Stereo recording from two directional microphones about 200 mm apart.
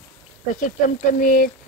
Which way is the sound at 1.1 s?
40° left (ahead or behind).